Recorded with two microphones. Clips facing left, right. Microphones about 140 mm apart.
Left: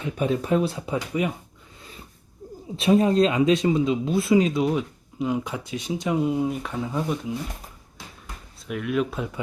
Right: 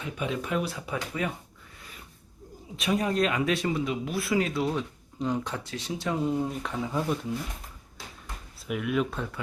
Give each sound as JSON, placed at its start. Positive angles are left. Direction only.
{"t": 0.0, "sound": "speech", "side_deg": 35}
{"t": 2.7, "sound": "speech", "side_deg": 30}
{"t": 8.6, "sound": "speech", "side_deg": 0}